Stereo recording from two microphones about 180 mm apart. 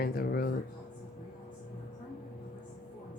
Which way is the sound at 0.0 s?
55° left (ahead or behind).